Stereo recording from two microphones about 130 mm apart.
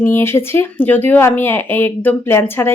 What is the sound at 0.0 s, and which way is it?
Speech, 15° left (ahead or behind).